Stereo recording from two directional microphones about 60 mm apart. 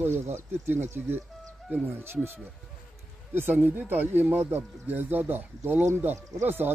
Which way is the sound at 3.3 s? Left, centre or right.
Right.